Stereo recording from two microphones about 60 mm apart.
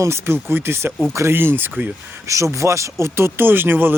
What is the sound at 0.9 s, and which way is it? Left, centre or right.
Speech, centre.